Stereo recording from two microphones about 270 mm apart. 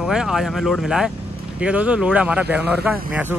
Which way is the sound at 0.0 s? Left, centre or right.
Centre.